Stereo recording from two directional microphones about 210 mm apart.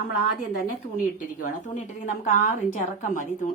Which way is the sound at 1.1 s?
35° left (ahead or behind).